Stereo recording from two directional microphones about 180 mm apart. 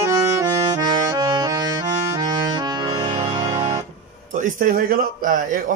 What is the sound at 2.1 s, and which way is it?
Saxophone, 25° right (ahead or behind).